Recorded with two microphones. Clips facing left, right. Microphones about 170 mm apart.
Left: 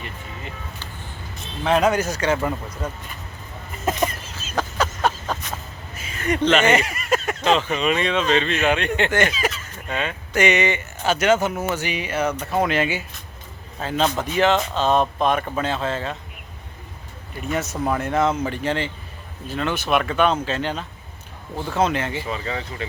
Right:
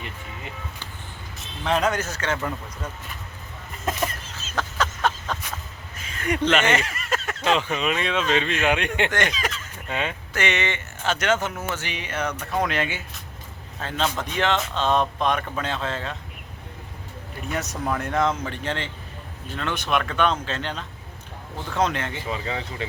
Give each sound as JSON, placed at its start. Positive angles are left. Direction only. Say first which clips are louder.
{"t": 0.0, "sound": "vehicle", "louder": "left 2 dB", "side_deg": -15}
{"t": 1.4, "sound": "speech", "louder": "left 4 dB", "side_deg": 5}
{"t": 3.8, "sound": "chicken", "louder": "left 4 dB", "side_deg": 10}
{"t": 6.2, "sound": "speech", "louder": "left 3 dB", "side_deg": -10}
{"t": 6.6, "sound": "a sound", "louder": "left 4 dB", "side_deg": 10}
{"t": 7.4, "sound": "speech", "louder": "left 1 dB", "side_deg": -10}
{"t": 9.0, "sound": "speech", "louder": "left 4 dB", "side_deg": 5}
{"t": 9.7, "sound": "speech", "louder": "left 1 dB", "side_deg": -15}
{"t": 10.3, "sound": "speech", "louder": "left 7 dB", "side_deg": 15}
{"t": 17.5, "sound": "speech", "louder": "left 4 dB", "side_deg": 0}
{"t": 22.3, "sound": "speech", "louder": "left 1 dB", "side_deg": -15}